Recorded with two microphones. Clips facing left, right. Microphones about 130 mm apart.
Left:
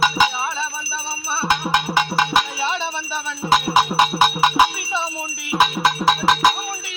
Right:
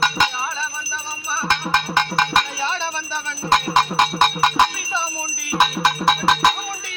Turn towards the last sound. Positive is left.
turn(degrees=0)  # may be behind; listen again after turning